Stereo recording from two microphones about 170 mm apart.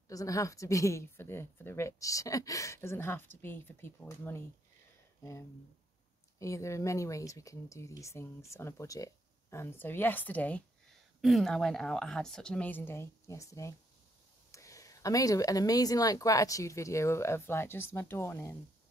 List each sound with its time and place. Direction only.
0.1 s speech: 20° left (ahead or behind)
6.4 s speech: 15° left (ahead or behind)